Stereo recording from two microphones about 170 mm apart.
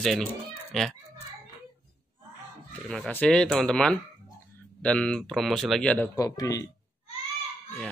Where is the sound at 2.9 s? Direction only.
5° left (ahead or behind).